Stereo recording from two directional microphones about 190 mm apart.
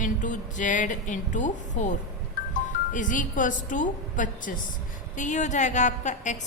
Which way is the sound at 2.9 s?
45° left (ahead or behind).